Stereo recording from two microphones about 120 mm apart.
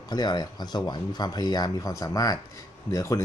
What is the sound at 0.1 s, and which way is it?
A man's voice, 35° left (ahead or behind).